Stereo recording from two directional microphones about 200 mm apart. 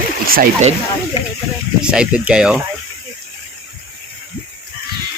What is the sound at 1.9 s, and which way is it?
Speech, 5° right (ahead or behind).